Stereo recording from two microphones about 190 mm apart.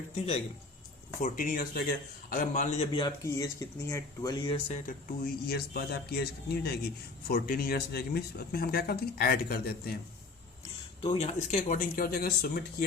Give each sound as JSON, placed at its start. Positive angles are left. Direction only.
{"t": 0.2, "sound": "a man's voice", "side_deg": 30}
{"t": 1.2, "sound": "a man's voice", "side_deg": 45}
{"t": 3.2, "sound": "speech", "side_deg": 15}
{"t": 4.9, "sound": "speech", "side_deg": 50}
{"t": 11.0, "sound": "speech", "side_deg": 30}